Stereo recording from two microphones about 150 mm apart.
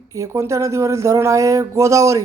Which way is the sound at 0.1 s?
20° right (ahead or behind).